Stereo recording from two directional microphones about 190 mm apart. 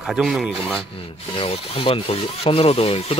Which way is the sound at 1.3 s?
30° left (ahead or behind).